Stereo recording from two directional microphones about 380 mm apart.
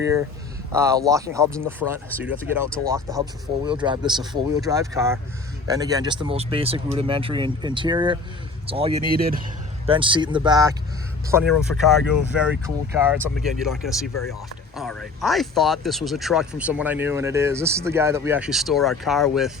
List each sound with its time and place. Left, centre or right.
0.0 s speech: centre
2.9 s speech: centre
14.8 s speech: centre